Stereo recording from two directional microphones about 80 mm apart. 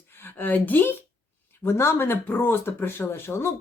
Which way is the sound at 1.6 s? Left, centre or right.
Left.